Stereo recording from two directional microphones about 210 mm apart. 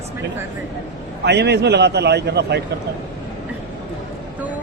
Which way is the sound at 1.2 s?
55° right (ahead or behind).